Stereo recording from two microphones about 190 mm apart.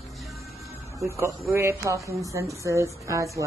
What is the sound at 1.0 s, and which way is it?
Speech, 15° right (ahead or behind).